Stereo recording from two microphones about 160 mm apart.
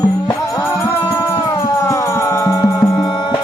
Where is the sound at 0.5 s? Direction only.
20° left (ahead or behind).